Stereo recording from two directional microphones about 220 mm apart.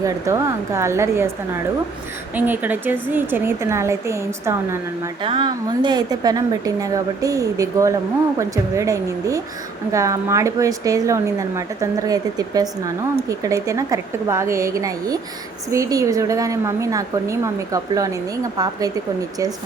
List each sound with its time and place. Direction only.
0.0 s a woman's voice: 15° right (ahead or behind)
2.3 s a woman's voice: 10° right (ahead or behind)